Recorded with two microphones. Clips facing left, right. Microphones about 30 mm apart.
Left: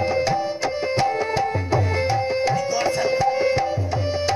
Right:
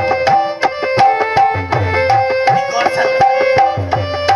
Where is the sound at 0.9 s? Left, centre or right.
Right.